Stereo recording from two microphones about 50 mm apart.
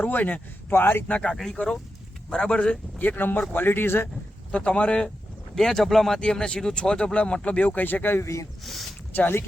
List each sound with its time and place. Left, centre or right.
0.0 s speech: left
1.4 s speech: centre
3.2 s speech: left
4.5 s speech: left
5.5 s speech: centre
6.1 s speech: centre; by 8.2 s left
8.2 s speech: left
8.6 s speech: centre
9.1 s speech: left